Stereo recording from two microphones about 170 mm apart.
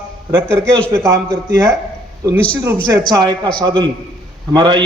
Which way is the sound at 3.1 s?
25° right (ahead or behind).